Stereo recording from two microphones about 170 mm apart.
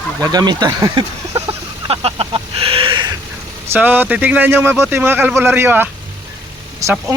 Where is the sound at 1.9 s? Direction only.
35° right (ahead or behind).